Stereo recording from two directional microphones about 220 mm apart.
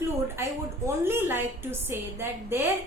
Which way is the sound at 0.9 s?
10° right (ahead or behind).